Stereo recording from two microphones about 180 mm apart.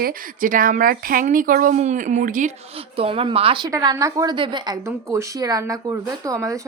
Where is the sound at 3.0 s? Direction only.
30° right (ahead or behind).